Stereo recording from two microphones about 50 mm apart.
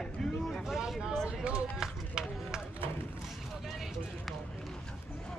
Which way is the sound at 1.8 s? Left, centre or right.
Centre.